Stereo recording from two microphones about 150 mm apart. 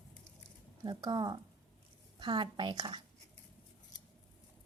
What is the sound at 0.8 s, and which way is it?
Speech, 25° right (ahead or behind).